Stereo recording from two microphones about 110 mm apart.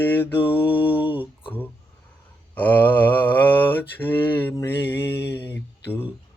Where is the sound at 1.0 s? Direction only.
15° right (ahead or behind).